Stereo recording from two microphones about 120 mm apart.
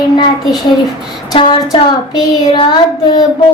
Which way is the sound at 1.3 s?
45° left (ahead or behind).